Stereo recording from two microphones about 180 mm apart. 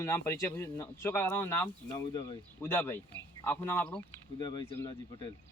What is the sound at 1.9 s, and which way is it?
Speech, 30° left (ahead or behind).